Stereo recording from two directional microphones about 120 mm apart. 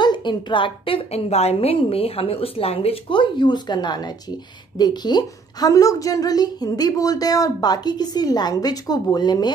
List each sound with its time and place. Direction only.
0.0 s a woman's voice: 40° left (ahead or behind)